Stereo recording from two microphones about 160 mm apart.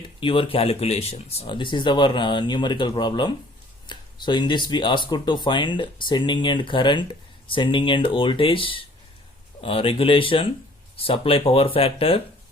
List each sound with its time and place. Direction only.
0.2 s speech: 30° left (ahead or behind)